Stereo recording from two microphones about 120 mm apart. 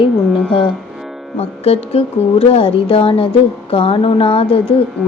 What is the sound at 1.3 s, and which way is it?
A woman's voice, 55° left (ahead or behind).